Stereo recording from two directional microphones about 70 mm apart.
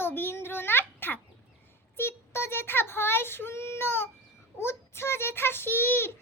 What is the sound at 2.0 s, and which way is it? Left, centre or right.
Child singing, left.